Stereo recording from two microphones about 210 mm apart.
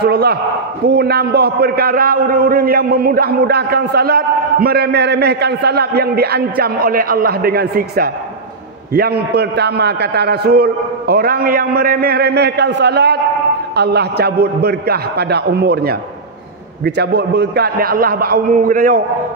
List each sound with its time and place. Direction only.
0.0 s a man's voice: 50° right (ahead or behind)